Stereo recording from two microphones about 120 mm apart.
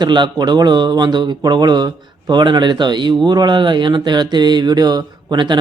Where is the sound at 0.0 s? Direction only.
40° right (ahead or behind).